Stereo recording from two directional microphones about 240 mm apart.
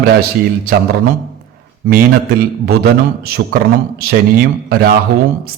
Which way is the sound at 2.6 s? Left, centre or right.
Right.